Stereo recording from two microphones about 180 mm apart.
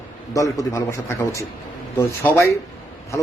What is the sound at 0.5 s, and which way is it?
A man's voice, 15° left (ahead or behind).